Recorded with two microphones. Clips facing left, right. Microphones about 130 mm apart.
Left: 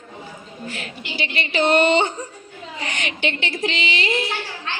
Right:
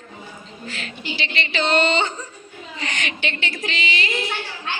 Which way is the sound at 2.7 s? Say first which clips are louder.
Even; 15° left (ahead or behind).